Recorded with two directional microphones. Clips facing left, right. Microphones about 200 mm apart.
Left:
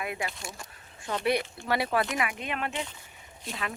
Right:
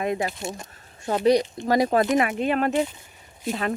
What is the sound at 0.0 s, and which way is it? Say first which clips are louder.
Speech: right 9 dB; 35° right (ahead or behind).